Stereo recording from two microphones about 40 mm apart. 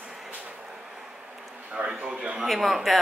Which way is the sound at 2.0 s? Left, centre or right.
Right.